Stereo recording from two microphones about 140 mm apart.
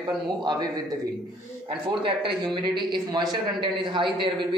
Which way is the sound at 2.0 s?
35° right (ahead or behind).